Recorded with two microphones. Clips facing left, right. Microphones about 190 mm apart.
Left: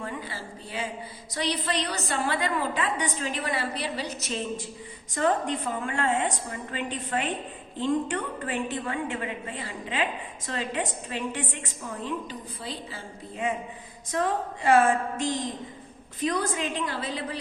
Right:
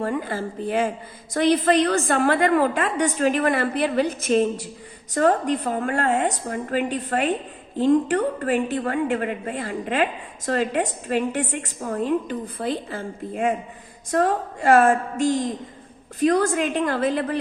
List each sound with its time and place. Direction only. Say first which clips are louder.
0.0 s a woman's voice: right 10 dB; 50° right (ahead or behind)
8.5 s a woman's voice: right 4 dB; 45° right (ahead or behind)